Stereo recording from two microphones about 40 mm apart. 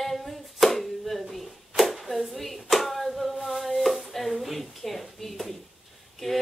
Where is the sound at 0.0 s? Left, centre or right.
Centre.